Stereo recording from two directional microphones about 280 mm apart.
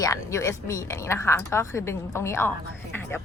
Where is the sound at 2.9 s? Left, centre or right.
Centre.